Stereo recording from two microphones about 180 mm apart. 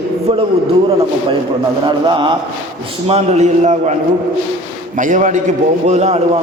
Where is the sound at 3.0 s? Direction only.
35° right (ahead or behind).